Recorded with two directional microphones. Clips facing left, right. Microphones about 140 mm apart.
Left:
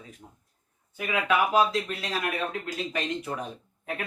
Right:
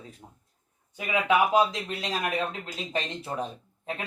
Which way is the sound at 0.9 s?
20° right (ahead or behind).